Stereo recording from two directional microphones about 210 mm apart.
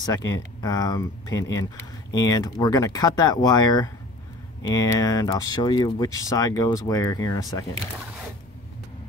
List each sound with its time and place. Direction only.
0.6 s speech: 20° left (ahead or behind)